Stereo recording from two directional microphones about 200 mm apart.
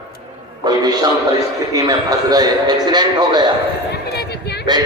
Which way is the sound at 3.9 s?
55° left (ahead or behind).